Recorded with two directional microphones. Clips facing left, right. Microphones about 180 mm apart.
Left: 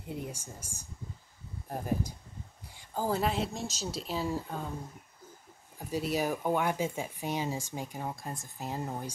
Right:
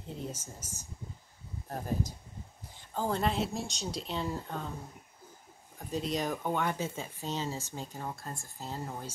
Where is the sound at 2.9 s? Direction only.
5° left (ahead or behind).